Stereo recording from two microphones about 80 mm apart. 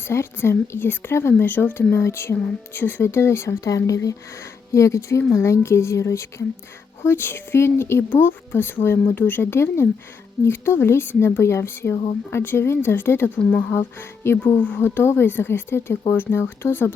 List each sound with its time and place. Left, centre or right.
0.1 s speech: left
14.8 s speech: left